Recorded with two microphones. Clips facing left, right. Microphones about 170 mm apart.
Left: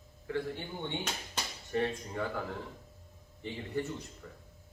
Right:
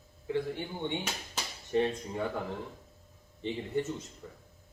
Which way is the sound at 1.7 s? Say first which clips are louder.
Right 3 dB; 20° right (ahead or behind).